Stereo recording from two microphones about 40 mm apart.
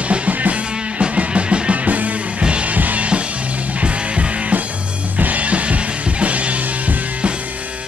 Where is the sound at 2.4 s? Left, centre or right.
Right.